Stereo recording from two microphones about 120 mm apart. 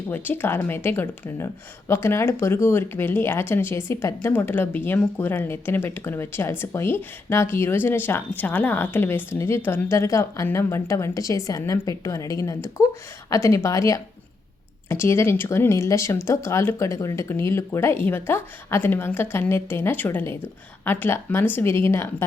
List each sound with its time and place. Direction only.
0.1 s speech: 15° left (ahead or behind)